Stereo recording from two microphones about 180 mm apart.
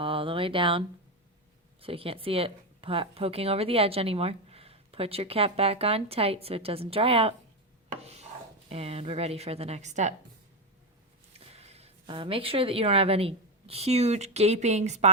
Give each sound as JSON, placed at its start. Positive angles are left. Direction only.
{"t": 0.0, "sound": "speech", "side_deg": -30}
{"t": 8.0, "sound": "chopping", "side_deg": -35}
{"t": 8.7, "sound": "speech", "side_deg": -35}
{"t": 11.3, "sound": "speech", "side_deg": -35}